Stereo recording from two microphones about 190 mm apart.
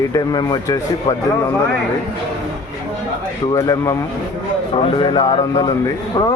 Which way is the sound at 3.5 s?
15° left (ahead or behind).